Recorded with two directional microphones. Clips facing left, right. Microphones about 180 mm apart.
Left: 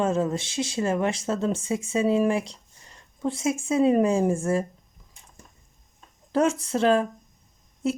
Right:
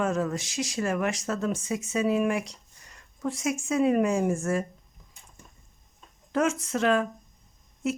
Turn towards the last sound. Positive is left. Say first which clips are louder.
# left 3 dB
turn(degrees=30)  # may be behind; listen again after turning